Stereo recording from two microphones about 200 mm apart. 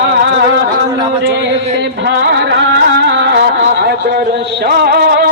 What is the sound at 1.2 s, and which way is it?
Music, 60° right (ahead or behind).